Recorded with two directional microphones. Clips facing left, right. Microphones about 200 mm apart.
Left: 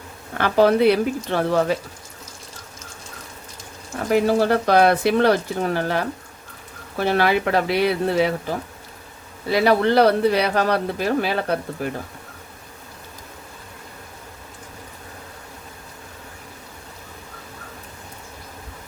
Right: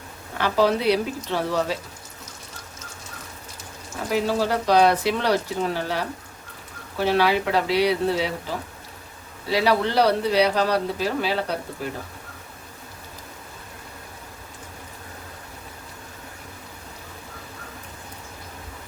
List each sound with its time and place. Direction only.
0.3 s speech: 55° left (ahead or behind)
4.1 s speech: 55° left (ahead or behind)
7.0 s speech: 55° left (ahead or behind)